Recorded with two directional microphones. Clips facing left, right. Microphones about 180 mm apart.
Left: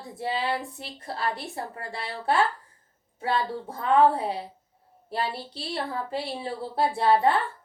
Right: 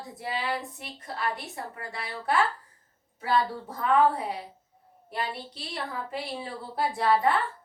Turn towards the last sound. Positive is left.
turn(degrees=30)  # may be behind; listen again after turning